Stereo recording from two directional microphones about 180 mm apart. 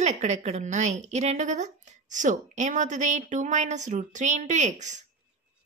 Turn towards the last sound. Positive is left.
turn(degrees=-40)  # may be behind; listen again after turning